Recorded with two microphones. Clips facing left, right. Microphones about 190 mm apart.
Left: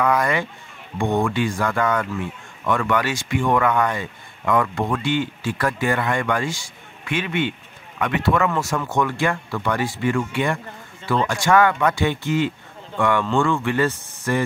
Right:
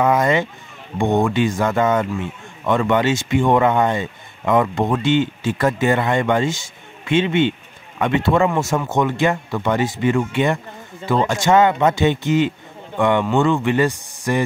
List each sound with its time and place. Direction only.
0.0 s a man's voice: 25° right (ahead or behind)